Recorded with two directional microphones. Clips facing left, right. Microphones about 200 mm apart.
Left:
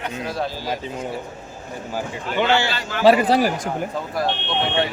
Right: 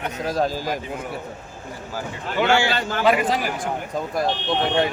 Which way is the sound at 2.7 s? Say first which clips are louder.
Right 3 dB; 50° right (ahead or behind).